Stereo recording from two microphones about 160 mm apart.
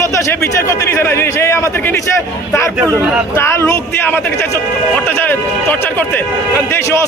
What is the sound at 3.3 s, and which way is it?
A man's voice, 15° left (ahead or behind).